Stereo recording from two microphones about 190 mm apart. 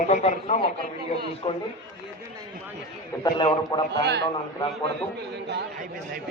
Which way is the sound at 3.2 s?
25° left (ahead or behind).